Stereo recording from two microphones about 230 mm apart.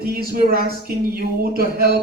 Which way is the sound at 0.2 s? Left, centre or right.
Right.